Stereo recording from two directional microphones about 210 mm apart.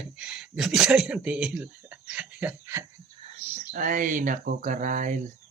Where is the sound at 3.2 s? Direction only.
30° right (ahead or behind).